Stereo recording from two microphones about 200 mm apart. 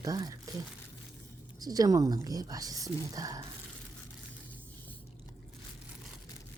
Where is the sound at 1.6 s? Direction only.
20° right (ahead or behind).